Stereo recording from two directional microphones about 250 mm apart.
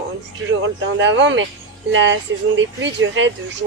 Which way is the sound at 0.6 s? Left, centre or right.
Right.